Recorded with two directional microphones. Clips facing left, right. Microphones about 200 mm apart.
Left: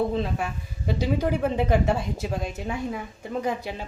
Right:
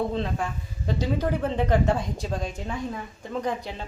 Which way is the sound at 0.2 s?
10° left (ahead or behind).